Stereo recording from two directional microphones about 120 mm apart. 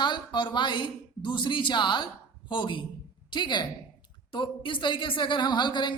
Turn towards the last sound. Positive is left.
turn(degrees=40)  # may be behind; listen again after turning